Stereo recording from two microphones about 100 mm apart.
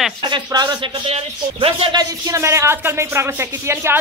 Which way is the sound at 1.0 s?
75° right (ahead or behind).